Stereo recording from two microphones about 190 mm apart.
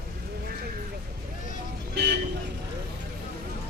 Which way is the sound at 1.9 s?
60° right (ahead or behind).